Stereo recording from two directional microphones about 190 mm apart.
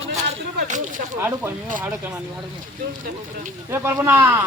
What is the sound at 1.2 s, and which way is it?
Speech, 10° right (ahead or behind).